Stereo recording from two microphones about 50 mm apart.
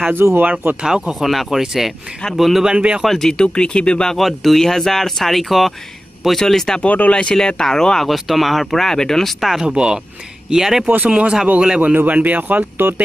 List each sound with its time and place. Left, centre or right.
0.1 s speech: right
0.4 s speech: right
0.8 s speech: centre
1.2 s speech: centre
1.6 s speech: centre
2.3 s speech: centre
2.6 s speech: centre
3.1 s speech: centre
4.2 s speech: centre
6.8 s speech: left; by 9.3 s centre
9.4 s speech: centre
9.7 s speech: right
10.5 s speech: centre
11.1 s speech: right